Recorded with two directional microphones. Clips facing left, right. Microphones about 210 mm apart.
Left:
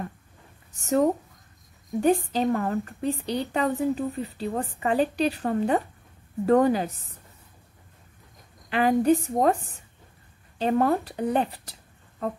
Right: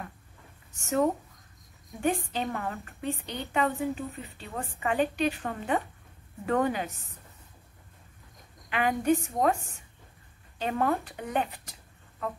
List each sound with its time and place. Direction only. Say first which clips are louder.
0.7 s a woman's voice: left 4 dB; 35° left (ahead or behind)
8.6 s a woman's voice: left 5 dB; 35° left (ahead or behind)
10.6 s a woman's voice: left 6 dB; 35° left (ahead or behind)